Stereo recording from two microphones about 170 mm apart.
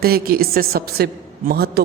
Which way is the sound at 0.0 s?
60° right (ahead or behind).